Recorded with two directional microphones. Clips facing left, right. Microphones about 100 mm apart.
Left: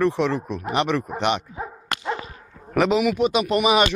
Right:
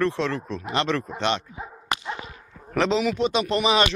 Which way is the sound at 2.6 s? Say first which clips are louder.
Left 3 dB; 10° left (ahead or behind).